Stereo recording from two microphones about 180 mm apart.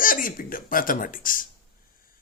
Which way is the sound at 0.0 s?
50° left (ahead or behind).